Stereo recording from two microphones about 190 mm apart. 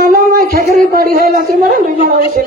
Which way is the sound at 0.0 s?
50° right (ahead or behind).